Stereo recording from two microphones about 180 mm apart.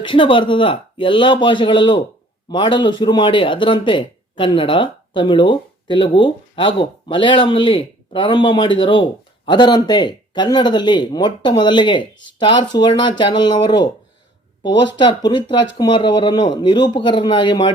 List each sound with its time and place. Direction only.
0.0 s speech: 30° left (ahead or behind)
14.9 s speech: 25° left (ahead or behind)